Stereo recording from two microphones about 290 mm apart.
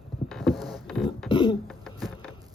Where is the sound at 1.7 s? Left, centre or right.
Centre.